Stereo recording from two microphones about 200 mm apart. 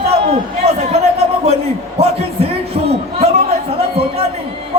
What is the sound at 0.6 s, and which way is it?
Chatter, 30° right (ahead or behind).